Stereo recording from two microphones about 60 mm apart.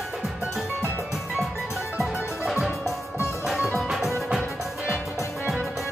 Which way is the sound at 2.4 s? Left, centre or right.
Centre.